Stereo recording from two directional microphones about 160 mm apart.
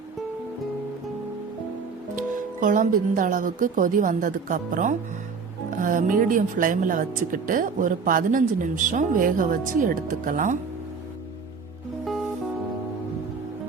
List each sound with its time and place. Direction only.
2.1 s speech: 55° right (ahead or behind)